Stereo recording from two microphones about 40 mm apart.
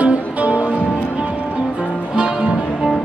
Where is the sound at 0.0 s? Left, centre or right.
Right.